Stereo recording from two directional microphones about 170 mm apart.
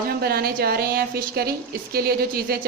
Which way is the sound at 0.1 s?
65° right (ahead or behind).